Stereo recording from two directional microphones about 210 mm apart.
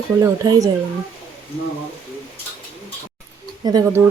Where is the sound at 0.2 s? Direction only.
15° right (ahead or behind).